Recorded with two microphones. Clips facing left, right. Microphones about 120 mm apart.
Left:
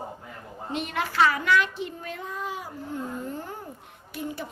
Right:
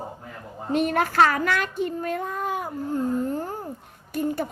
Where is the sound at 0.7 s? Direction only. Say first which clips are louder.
Right 8 dB; 45° right (ahead or behind).